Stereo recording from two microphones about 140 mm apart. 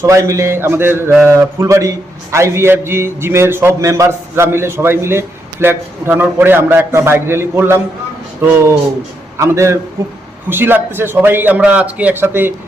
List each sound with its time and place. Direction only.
0.0 s a man's voice: 20° right (ahead or behind)
9.4 s a man's voice: 20° right (ahead or behind)